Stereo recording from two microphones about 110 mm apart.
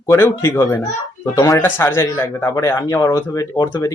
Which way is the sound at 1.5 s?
20° left (ahead or behind).